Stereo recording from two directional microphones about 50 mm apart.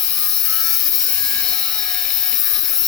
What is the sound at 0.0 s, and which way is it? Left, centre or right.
Helicopter, centre.